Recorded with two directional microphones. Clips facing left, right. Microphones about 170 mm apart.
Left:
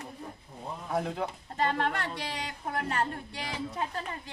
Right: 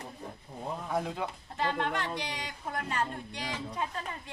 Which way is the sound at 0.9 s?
Centre (ahead or behind).